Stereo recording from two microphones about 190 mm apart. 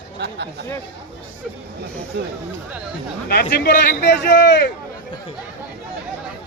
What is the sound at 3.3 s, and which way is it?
Speech, 55° left (ahead or behind).